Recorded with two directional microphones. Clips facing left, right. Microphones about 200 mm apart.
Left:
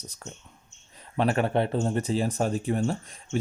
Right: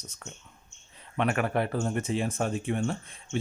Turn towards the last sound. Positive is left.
turn(degrees=40)  # may be behind; listen again after turning